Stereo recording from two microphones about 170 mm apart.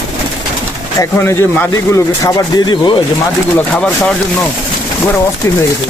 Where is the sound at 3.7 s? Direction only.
5° left (ahead or behind).